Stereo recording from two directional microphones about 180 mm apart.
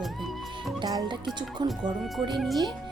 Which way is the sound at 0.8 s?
25° right (ahead or behind).